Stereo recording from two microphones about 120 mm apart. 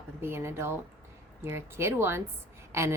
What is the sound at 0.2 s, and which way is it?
Speech, 20° right (ahead or behind).